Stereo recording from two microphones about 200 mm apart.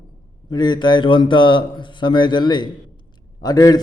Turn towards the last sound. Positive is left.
turn(degrees=20)  # may be behind; listen again after turning